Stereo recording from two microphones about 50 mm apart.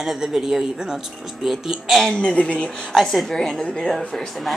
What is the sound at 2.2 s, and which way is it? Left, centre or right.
A woman's voice, left.